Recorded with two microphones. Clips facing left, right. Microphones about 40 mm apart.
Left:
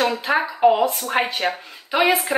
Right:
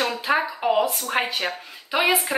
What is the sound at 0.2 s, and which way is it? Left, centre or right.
Speech, centre.